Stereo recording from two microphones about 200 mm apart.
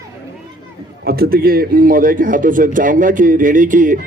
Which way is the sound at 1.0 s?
50° right (ahead or behind).